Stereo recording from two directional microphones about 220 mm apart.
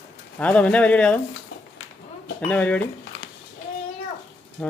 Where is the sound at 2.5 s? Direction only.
5° left (ahead or behind).